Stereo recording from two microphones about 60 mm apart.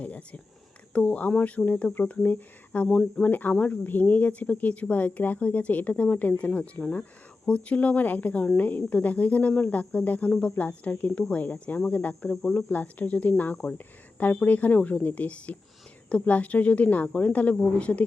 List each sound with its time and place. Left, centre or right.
0.0 s a sound: left
0.9 s speech: left
12.3 s speech: centre
12.7 s speech: left